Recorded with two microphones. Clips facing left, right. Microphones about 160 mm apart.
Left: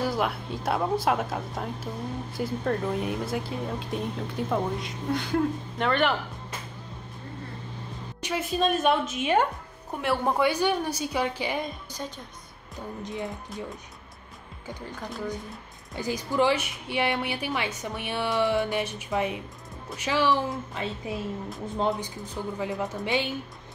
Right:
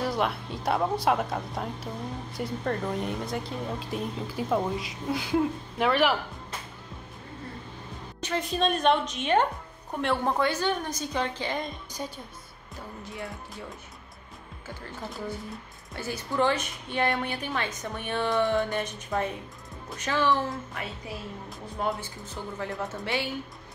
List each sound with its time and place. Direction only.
0.0 s speech: centre (ahead or behind)
8.2 s speech: 10° left (ahead or behind)
12.0 s a woman's voice: 10° right (ahead or behind)
13.0 s a woman's voice: 20° left (ahead or behind)
15.9 s speech: 15° left (ahead or behind)
20.4 s a woman's voice: 20° left (ahead or behind)